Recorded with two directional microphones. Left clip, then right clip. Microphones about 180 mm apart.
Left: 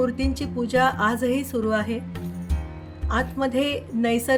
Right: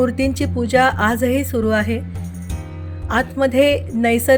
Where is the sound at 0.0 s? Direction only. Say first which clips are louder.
Right 6 dB; 35° right (ahead or behind).